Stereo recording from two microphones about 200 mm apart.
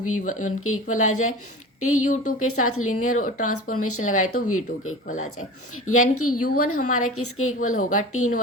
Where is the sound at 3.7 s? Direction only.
90° left.